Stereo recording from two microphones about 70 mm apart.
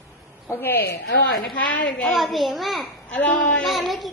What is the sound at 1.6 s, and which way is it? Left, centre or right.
Speech, left.